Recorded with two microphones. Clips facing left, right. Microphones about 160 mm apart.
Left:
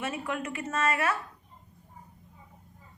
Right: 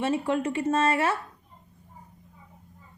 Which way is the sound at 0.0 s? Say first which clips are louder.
Right 8 dB; 30° right (ahead or behind).